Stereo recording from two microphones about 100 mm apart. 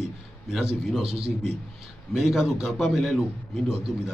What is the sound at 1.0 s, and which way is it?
Speech, 80° right.